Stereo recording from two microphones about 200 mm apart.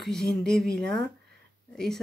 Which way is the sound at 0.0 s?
Centre (ahead or behind).